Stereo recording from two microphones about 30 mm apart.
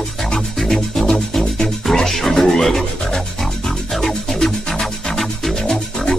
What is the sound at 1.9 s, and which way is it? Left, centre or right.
Music, centre.